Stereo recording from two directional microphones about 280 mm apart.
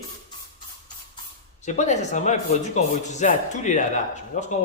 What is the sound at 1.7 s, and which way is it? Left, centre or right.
Speech, left.